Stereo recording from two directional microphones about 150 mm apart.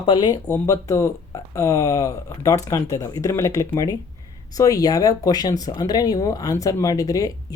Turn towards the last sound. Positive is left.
turn(degrees=20)  # may be behind; listen again after turning